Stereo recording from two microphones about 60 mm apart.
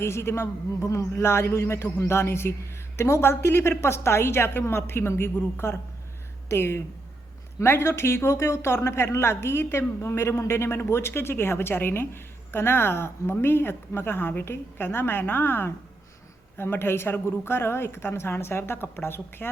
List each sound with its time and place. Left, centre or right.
0.0 s a woman's voice: left